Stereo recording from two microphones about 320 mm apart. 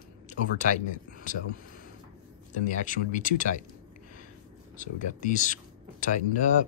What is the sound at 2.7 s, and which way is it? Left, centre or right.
Speech, left.